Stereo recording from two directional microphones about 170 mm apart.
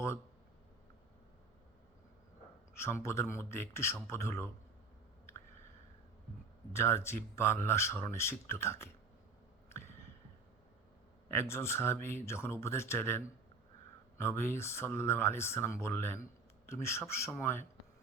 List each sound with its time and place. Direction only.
2.7 s speech: 15° left (ahead or behind)
6.7 s speech: 15° left (ahead or behind)
11.3 s speech: 15° left (ahead or behind)